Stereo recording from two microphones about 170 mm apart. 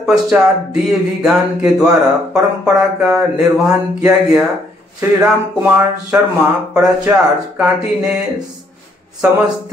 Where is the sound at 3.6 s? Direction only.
5° right (ahead or behind).